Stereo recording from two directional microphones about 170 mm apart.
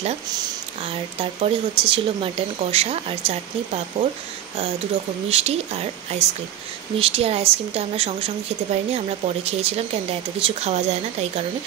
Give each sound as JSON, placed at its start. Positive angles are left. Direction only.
{"t": 0.4, "sound": "speech", "side_deg": -30}
{"t": 5.3, "sound": "speech", "side_deg": -40}